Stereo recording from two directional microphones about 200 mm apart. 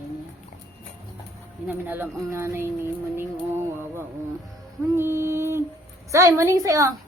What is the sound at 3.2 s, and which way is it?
Music, 10° right (ahead or behind).